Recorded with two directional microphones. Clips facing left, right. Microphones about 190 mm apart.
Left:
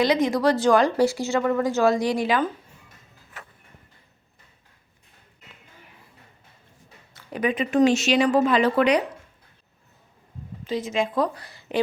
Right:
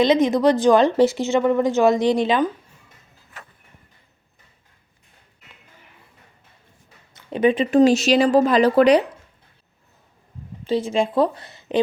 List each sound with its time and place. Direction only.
0.0 s speech: 20° right (ahead or behind)
7.1 s speech: 20° right (ahead or behind)
10.6 s a woman's voice: 30° right (ahead or behind)